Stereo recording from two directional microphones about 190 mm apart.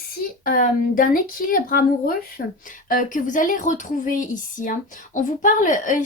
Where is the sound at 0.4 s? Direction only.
45° left (ahead or behind).